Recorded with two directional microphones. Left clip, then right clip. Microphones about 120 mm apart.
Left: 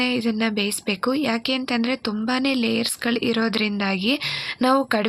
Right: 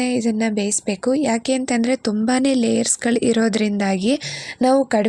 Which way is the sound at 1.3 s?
50° right (ahead or behind).